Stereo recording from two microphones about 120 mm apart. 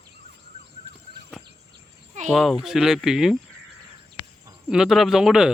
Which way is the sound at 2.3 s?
Centre (ahead or behind).